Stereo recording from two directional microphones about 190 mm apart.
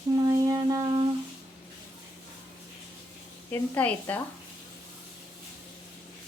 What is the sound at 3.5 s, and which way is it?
Speech, 10° left (ahead or behind).